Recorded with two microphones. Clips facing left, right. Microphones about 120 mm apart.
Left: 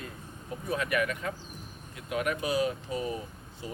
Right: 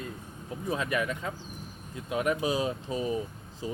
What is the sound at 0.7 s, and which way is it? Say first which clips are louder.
Speech: even; 25° right (ahead or behind).